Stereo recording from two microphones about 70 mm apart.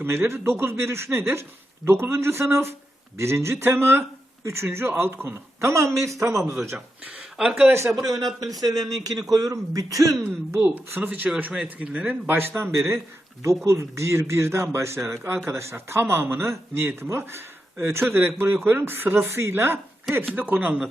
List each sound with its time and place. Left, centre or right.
0.0 s speech: right
6.5 s speech: right
6.7 s speech: centre
7.7 s speech: right
8.0 s speech: right
10.8 s speech: right
11.6 s speech: centre
12.3 s speech: right
13.7 s speech: right